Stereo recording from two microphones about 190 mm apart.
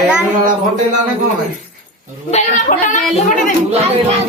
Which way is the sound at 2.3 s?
40° left (ahead or behind).